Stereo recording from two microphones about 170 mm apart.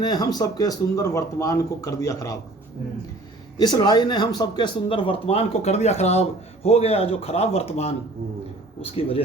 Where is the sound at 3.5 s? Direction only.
25° left (ahead or behind).